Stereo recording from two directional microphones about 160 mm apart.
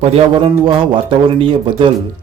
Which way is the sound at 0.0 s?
35° right (ahead or behind).